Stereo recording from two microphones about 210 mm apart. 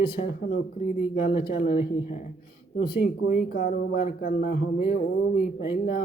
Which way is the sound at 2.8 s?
45° left (ahead or behind).